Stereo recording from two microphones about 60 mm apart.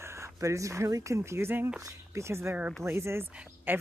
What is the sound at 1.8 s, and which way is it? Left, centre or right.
Speech, right.